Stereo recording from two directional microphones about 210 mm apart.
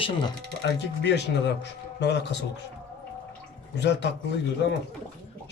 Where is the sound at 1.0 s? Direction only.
55° left (ahead or behind).